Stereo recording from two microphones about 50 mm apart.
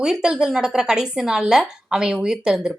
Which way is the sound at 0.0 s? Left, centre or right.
Centre.